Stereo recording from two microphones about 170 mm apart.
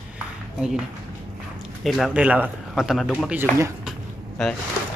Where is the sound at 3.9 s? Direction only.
Centre (ahead or behind).